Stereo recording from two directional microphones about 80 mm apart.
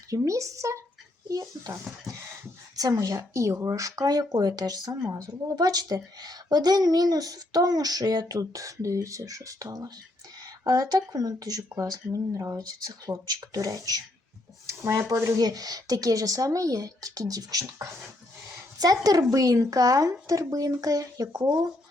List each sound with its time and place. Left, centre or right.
0.1 s speech: right
1.3 s a woman's voice: right
12.5 s a woman's voice: right
15.4 s a woman's voice: right
18.8 s a woman's voice: right